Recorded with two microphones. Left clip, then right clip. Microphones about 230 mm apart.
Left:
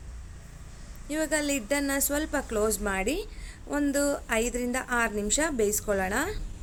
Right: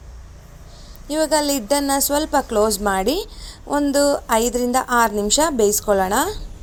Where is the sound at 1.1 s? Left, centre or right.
Centre.